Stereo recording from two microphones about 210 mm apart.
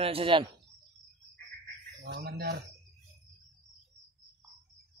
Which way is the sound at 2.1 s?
50° right (ahead or behind).